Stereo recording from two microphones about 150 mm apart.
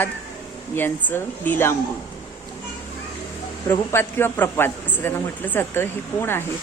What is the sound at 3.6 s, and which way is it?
A man's voice, 15° left (ahead or behind).